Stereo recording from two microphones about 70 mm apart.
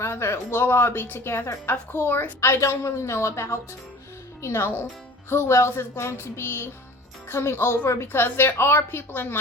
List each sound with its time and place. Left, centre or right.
0.0 s a woman's voice: left